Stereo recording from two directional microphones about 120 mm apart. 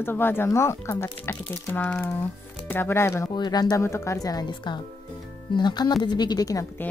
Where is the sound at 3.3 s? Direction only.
35° left (ahead or behind).